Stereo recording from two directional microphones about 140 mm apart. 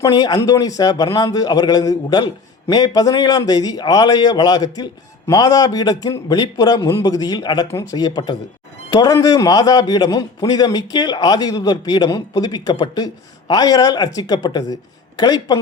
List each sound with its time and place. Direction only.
0.0 s a man's voice: 30° left (ahead or behind)